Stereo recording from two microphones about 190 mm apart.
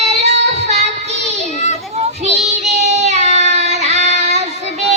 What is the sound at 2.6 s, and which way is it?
Child singing, 35° right (ahead or behind).